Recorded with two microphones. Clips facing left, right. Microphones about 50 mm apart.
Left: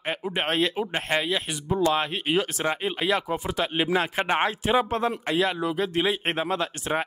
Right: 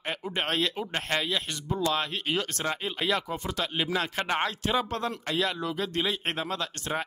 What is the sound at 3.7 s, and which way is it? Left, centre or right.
Speech, left.